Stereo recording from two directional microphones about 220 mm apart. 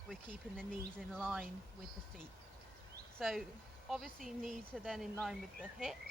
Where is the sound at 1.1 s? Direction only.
Centre (ahead or behind).